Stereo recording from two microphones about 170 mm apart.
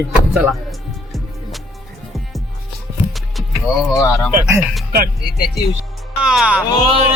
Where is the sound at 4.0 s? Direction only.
20° left (ahead or behind).